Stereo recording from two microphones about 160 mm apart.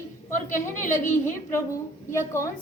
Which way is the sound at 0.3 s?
55° left (ahead or behind).